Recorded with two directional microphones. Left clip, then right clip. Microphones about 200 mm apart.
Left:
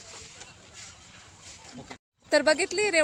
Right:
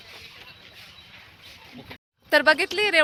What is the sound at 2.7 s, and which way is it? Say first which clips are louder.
Speech: right 4 dB; 5° left (ahead or behind).